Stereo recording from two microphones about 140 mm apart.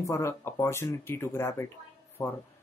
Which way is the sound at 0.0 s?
20° left (ahead or behind).